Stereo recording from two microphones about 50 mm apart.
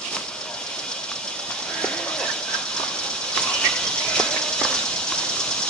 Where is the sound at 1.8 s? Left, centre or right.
Centre.